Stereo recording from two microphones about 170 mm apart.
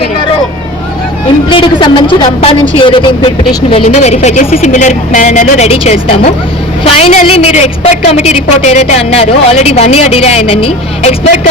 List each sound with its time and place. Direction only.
1.5 s a woman's voice: 30° left (ahead or behind)